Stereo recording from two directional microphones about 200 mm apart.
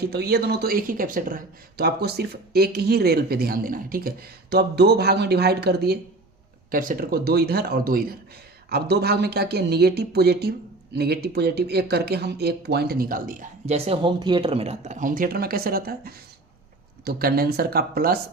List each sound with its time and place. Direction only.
0.1 s speech: 55° right (ahead or behind)